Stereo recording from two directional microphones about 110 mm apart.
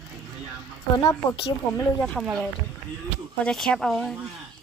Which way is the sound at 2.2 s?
Centre (ahead or behind).